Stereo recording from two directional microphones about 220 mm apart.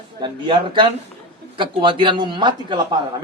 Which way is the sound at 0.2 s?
20° right (ahead or behind).